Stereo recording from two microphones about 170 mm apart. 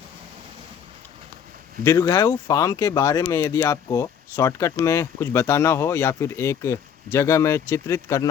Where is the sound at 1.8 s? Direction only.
20° left (ahead or behind).